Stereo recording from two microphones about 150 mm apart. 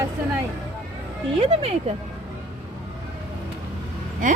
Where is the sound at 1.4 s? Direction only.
40° right (ahead or behind).